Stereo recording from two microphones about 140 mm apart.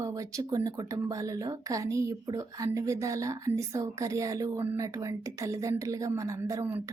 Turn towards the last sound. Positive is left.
turn(degrees=-20)  # may be behind; listen again after turning